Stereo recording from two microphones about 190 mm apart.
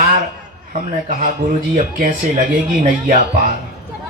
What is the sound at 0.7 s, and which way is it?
A man's voice, 40° right (ahead or behind).